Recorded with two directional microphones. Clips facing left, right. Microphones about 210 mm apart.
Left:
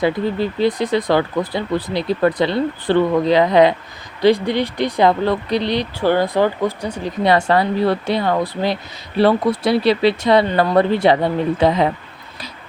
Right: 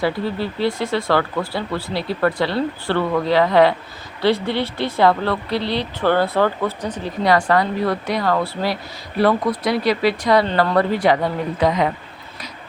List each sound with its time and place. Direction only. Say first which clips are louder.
0.0 s speech: left 3 dB; 20° left (ahead or behind)
7.3 s speech: left 1 dB; 25° left (ahead or behind)